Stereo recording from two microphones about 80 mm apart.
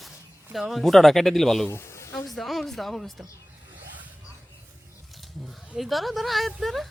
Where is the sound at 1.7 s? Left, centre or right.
Left.